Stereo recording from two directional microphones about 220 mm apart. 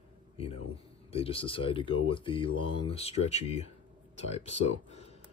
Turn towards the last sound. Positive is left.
turn(degrees=30)  # may be behind; listen again after turning